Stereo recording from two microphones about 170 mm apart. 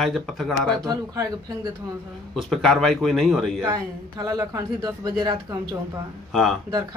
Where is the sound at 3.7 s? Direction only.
20° right (ahead or behind).